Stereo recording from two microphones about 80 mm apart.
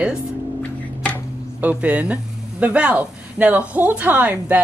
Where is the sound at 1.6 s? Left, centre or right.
Centre.